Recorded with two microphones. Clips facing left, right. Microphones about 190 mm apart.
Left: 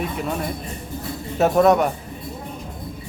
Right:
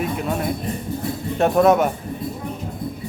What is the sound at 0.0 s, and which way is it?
Speech, centre (ahead or behind).